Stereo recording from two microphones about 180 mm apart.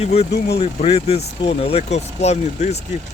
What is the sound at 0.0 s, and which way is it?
Speech, 35° left (ahead or behind).